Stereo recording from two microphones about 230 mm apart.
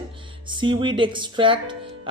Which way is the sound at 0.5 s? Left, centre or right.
Right.